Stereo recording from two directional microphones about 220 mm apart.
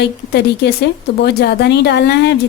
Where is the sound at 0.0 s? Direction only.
50° left (ahead or behind).